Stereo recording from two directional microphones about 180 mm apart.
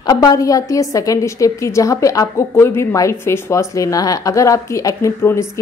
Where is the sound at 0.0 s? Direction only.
20° left (ahead or behind).